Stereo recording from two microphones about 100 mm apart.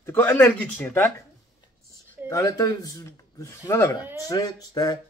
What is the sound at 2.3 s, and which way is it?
Speech, 35° left (ahead or behind).